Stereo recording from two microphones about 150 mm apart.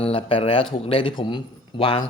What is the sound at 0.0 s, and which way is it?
Speech, 40° left (ahead or behind).